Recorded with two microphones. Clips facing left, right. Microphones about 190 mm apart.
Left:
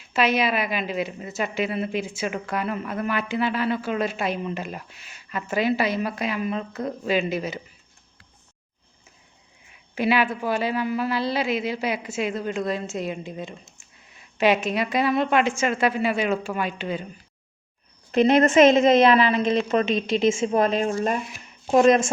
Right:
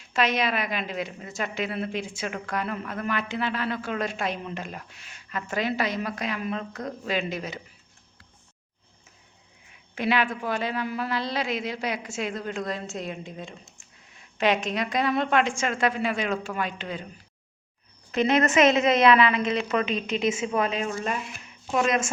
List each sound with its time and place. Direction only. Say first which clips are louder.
0.1 s a woman's voice: left 3 dB; 5° left (ahead or behind)
9.9 s a woman's voice: left 3 dB; 5° left (ahead or behind)
18.1 s a woman's voice: left 5 dB; 35° left (ahead or behind)